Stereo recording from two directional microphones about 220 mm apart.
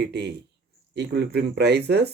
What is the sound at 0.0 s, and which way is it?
Speech, 50° right (ahead or behind).